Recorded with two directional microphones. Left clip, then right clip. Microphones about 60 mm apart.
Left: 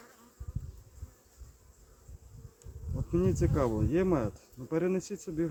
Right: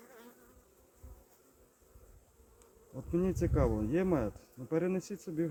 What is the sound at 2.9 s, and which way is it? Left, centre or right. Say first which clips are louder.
Speech: left 3 dB; right.